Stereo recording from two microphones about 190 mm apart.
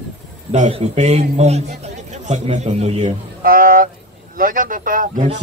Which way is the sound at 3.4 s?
50° right (ahead or behind).